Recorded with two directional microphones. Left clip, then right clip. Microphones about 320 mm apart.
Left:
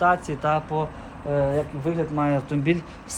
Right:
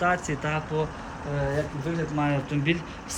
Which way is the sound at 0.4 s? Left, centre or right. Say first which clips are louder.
Left 7 dB; centre.